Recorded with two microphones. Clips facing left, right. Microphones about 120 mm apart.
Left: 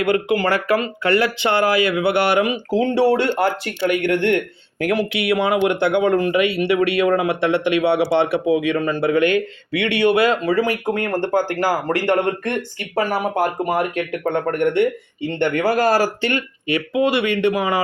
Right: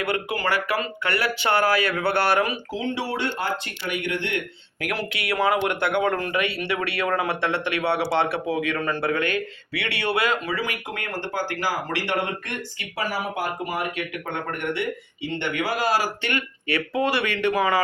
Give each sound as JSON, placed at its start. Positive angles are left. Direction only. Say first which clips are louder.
{"t": 0.0, "sound": "speech", "louder": "left 8 dB", "side_deg": 25}
{"t": 2.6, "sound": "speech", "louder": "left 9 dB", "side_deg": 40}
{"t": 3.0, "sound": "a man's voice", "louder": "left 11 dB", "side_deg": 55}
{"t": 4.9, "sound": "speech", "louder": "left 4 dB", "side_deg": 20}
{"t": 10.5, "sound": "a man's voice", "louder": "left 10 dB", "side_deg": 40}
{"t": 16.2, "sound": "speech", "louder": "left 6 dB", "side_deg": 25}